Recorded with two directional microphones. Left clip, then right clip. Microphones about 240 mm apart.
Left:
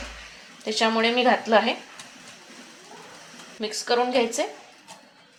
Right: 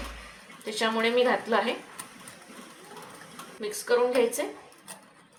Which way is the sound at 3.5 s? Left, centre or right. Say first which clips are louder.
Left 2 dB; left.